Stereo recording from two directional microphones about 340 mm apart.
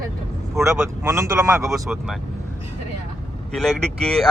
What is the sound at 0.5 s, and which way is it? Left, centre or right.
Speech, centre.